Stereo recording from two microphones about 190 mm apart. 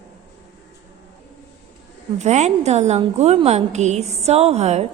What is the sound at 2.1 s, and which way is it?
A woman's voice, 35° right (ahead or behind).